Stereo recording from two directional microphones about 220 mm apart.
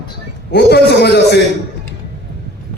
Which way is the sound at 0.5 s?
50° left (ahead or behind).